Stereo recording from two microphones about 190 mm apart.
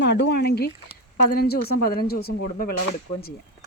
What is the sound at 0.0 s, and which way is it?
Speech, 65° left (ahead or behind).